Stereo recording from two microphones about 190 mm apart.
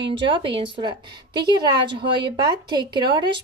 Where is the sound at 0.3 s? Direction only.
25° right (ahead or behind).